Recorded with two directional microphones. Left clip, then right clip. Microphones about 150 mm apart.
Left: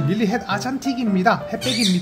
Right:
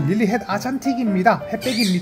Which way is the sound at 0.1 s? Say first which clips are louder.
Right 1 dB; 35° right (ahead or behind).